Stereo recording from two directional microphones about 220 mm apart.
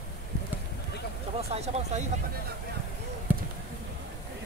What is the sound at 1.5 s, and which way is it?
Speech, 30° right (ahead or behind).